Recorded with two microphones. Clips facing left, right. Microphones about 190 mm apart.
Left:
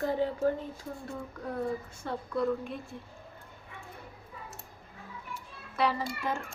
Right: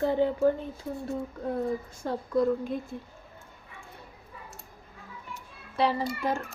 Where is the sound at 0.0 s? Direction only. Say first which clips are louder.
Right 4 dB; 30° right (ahead or behind).